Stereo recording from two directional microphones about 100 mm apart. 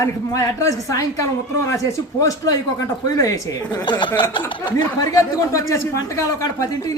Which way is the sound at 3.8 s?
50° left (ahead or behind).